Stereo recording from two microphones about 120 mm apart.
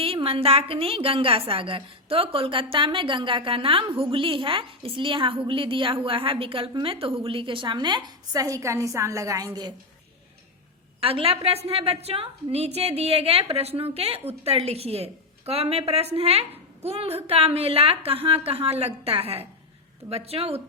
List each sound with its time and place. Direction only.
0.0 s a woman's voice: 50° right (ahead or behind); by 9.7 s 35° right (ahead or behind)
11.0 s a woman's voice: 55° right (ahead or behind)